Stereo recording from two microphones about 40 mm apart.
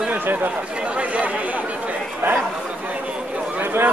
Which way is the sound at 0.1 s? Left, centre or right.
Right.